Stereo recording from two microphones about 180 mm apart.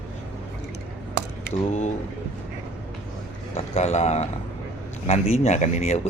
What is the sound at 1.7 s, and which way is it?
Speech, 40° left (ahead or behind).